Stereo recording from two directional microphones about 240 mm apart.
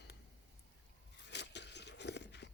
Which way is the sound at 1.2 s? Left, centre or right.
Left.